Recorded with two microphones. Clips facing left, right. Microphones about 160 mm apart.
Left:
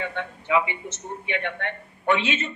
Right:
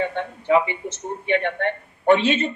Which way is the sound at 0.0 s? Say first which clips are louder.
Right 6 dB; 35° right (ahead or behind).